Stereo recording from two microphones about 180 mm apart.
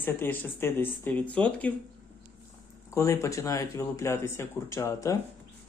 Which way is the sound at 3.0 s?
15° left (ahead or behind).